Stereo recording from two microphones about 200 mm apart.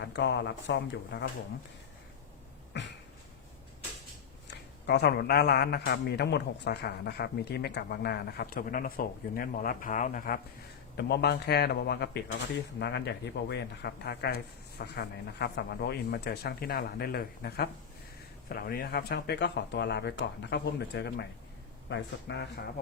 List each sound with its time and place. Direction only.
0.0 s speech: 60° left (ahead or behind)
4.4 s a man's voice: 55° left (ahead or behind)
10.9 s a man's voice: 55° left (ahead or behind)